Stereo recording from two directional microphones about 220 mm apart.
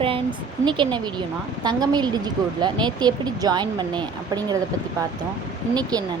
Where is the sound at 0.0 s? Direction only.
25° right (ahead or behind).